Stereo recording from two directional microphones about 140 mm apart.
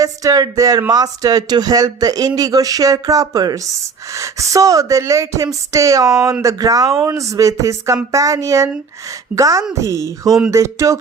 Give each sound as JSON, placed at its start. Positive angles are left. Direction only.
{"t": 0.0, "sound": "speech", "side_deg": -25}